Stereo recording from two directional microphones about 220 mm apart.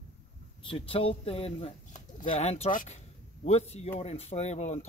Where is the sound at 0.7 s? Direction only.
25° left (ahead or behind).